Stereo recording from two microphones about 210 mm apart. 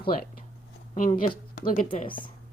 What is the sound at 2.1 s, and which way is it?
Speech, 25° left (ahead or behind).